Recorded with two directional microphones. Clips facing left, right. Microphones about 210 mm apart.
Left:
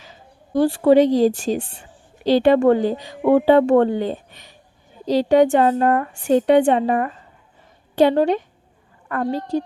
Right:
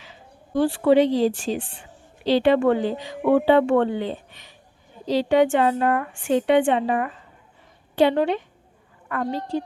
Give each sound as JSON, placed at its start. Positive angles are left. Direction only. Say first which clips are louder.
{"t": 0.0, "sound": "a woman's voice", "louder": "left 1 dB", "side_deg": 40}